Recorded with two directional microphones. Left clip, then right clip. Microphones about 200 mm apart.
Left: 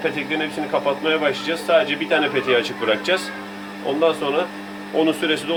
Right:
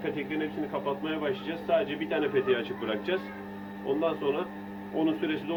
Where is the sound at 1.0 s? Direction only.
55° left (ahead or behind).